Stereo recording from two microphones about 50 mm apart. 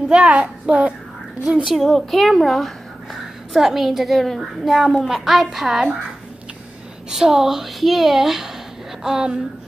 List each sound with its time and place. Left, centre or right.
0.1 s a child's voice: right
1.6 s a child's voice: centre
7.1 s a child's voice: centre